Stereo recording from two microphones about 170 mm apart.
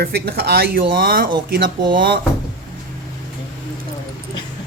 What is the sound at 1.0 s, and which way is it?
Speech, 60° right (ahead or behind).